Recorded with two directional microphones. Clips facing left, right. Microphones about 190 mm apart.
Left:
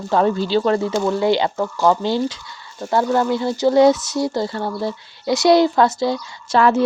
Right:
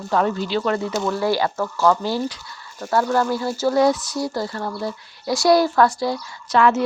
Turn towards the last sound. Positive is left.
turn(degrees=35)  # may be behind; listen again after turning